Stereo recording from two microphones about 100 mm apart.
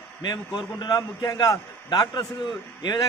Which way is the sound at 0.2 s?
45° left (ahead or behind).